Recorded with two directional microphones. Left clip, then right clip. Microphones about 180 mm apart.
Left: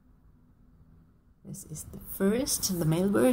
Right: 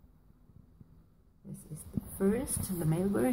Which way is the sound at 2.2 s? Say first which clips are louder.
Left 5 dB; 15° left (ahead or behind).